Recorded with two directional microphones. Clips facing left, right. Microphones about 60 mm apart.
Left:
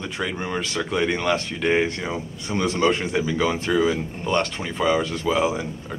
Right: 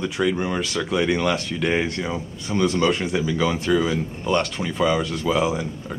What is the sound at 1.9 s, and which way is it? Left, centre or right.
A man's voice, centre.